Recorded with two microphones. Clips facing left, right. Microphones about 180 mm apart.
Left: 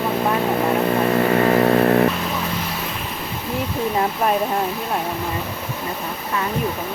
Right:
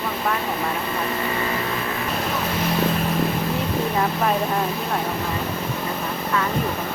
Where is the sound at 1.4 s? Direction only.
55° left (ahead or behind).